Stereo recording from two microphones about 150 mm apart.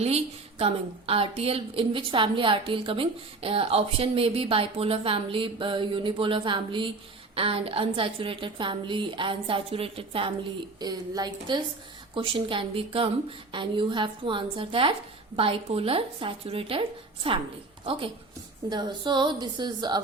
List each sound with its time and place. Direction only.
0.6 s a woman's voice: 40° right (ahead or behind)
10.8 s a woman's voice: 25° right (ahead or behind)
18.7 s a woman's voice: 30° right (ahead or behind)